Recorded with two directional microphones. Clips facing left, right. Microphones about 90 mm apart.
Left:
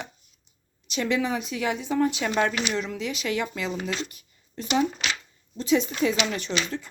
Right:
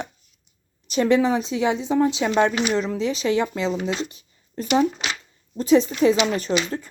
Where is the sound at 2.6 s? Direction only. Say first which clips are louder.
Right 6 dB; 35° right (ahead or behind).